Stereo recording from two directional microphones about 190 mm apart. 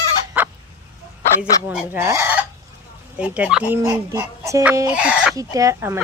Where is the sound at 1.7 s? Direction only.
10° right (ahead or behind).